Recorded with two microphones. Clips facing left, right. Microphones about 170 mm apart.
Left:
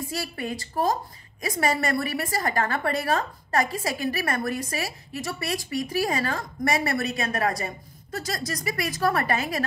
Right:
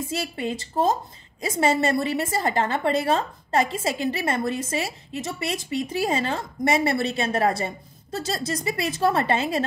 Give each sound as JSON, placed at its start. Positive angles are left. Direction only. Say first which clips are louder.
{"t": 0.1, "sound": "a woman's voice", "louder": "right 3 dB", "side_deg": -20}